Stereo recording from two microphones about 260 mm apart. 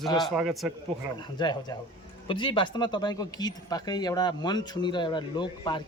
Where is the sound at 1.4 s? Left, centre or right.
Centre.